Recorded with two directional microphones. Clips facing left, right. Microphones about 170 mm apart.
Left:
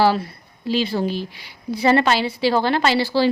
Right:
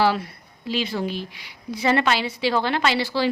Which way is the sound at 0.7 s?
30° left (ahead or behind).